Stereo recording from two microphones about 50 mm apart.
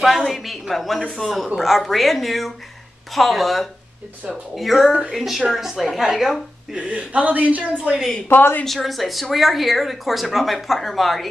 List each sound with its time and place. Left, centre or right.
0.0 s speech: centre
6.7 s a woman's voice: right
8.3 s a woman's voice: left
8.6 s speech: centre